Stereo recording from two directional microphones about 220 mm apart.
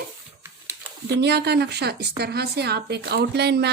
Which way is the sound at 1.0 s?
50° right (ahead or behind).